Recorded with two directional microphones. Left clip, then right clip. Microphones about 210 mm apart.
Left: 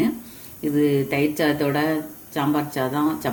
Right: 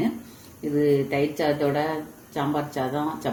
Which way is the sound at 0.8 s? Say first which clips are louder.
Left 1 dB; 30° left (ahead or behind).